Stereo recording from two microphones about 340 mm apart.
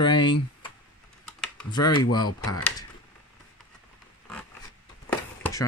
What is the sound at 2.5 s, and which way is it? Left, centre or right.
Speech, centre.